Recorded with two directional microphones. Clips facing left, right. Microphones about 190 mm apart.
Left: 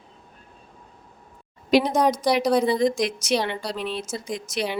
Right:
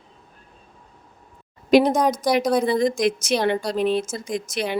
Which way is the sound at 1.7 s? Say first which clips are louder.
Right 3 dB; 50° right (ahead or behind).